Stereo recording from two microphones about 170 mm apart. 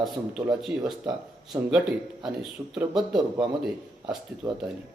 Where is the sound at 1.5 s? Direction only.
20° right (ahead or behind).